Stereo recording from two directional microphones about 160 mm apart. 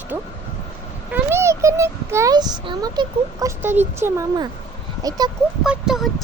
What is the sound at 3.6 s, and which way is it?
A woman's voice, 15° right (ahead or behind).